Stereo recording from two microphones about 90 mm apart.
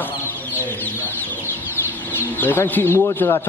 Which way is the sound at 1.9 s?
20° left (ahead or behind).